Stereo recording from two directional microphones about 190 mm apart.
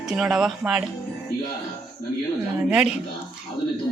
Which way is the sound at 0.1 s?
5° right (ahead or behind).